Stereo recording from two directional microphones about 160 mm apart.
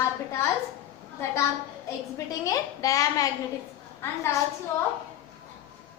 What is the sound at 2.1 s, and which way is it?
A woman's voice, 20° left (ahead or behind).